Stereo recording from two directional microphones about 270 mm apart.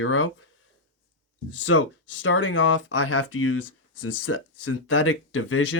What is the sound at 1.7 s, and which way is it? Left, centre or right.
Speech, left.